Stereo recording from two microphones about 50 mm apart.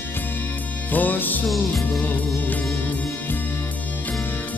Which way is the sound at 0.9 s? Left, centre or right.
Left.